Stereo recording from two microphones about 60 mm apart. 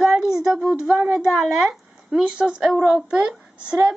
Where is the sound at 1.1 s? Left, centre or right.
Centre.